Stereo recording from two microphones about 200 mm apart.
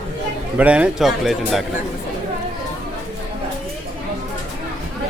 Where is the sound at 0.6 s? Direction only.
5° right (ahead or behind).